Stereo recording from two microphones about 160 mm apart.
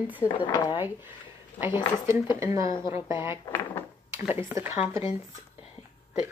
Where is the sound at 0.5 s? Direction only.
25° left (ahead or behind).